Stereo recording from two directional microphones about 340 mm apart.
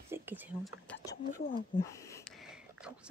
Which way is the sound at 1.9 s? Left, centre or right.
Centre.